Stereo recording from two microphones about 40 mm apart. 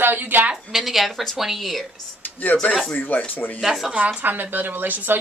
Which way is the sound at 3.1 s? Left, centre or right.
Left.